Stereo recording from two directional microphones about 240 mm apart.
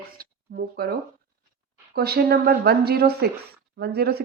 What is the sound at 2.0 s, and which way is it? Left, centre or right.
Speech, right.